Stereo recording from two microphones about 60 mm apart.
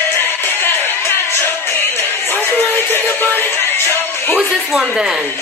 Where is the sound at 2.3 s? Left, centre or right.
Left.